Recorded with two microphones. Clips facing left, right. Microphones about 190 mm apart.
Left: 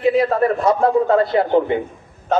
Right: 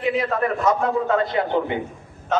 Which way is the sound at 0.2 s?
35° left (ahead or behind).